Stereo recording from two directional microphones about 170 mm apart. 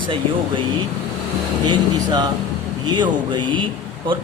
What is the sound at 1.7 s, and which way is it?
A man's voice, 25° right (ahead or behind).